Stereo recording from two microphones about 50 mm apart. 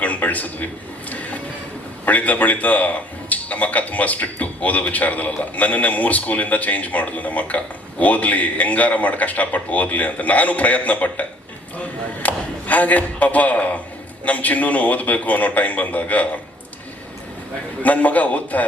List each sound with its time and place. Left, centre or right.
0.0 s a man's voice: left
2.0 s a man's voice: left
17.8 s a man's voice: left